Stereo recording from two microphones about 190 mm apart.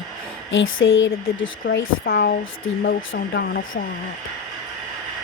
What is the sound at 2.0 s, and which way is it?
Speech, 55° left (ahead or behind).